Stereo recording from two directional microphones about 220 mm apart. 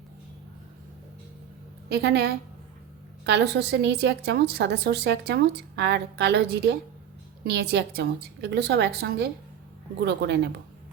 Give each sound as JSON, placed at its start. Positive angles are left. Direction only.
{"t": 1.9, "sound": "a woman's voice", "side_deg": -50}